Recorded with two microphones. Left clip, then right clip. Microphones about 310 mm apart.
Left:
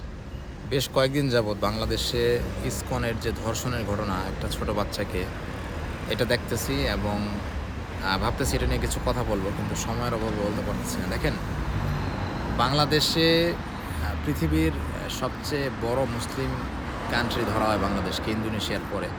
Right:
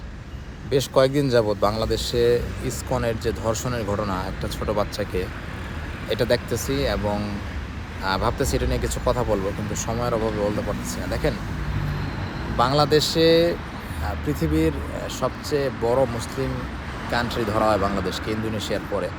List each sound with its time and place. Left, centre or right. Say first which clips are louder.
0.7 s speech: right 5 dB; centre
12.5 s speech: right 5 dB; centre